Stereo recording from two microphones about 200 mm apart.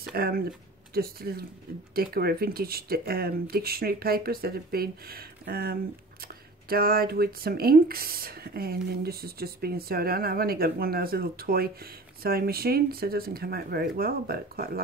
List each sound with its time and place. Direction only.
0.1 s speech: 50° right (ahead or behind)